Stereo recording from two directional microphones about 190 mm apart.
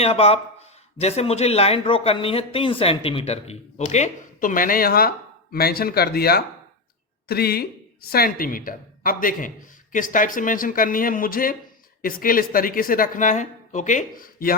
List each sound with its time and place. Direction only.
0.0 s a man's voice: 30° left (ahead or behind); by 14.5 s 50° left (ahead or behind)